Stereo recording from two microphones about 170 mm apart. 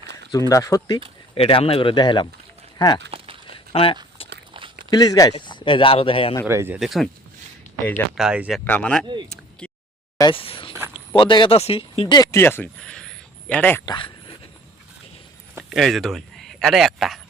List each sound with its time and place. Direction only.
0.3 s speech: 20° left (ahead or behind)
1.4 s speech: 35° left (ahead or behind)
3.5 s a sound: 30° left (ahead or behind)
4.9 s speech: 20° left (ahead or behind)
6.5 s speech: 15° right (ahead or behind)
6.7 s speech: centre (ahead or behind)
8.1 s speech: 5° right (ahead or behind)
8.6 s speech: 10° left (ahead or behind)
9.3 s a sound: 5° left (ahead or behind)
10.2 s speech: 30° left (ahead or behind); by 13.8 s 10° left (ahead or behind)
13.8 s dog: 30° left (ahead or behind)
15.7 s speech: centre (ahead or behind)